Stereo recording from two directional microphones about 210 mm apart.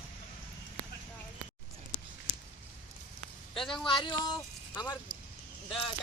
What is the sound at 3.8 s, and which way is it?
Speech, 25° left (ahead or behind).